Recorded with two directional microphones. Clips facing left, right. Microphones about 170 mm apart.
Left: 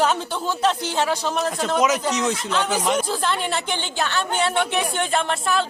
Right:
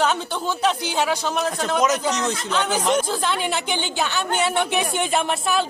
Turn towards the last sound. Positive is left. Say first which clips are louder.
# even
turn(degrees=-10)  # may be behind; listen again after turning